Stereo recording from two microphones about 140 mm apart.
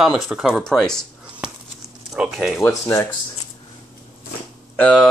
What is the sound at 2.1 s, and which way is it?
Speech, 5° right (ahead or behind).